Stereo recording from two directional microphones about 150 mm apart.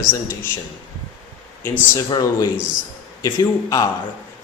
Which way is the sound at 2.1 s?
20° left (ahead or behind).